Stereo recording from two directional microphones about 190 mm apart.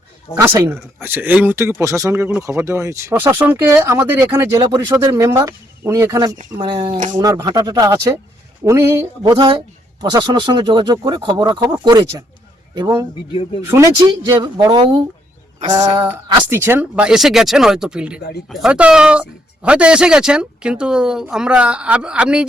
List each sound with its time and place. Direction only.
0.3 s a man's voice: 15° right (ahead or behind)
9.3 s a man's voice: 25° right (ahead or behind); by 22.4 s 5° right (ahead or behind)